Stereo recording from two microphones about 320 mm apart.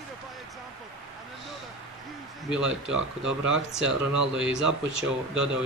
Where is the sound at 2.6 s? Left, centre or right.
Right.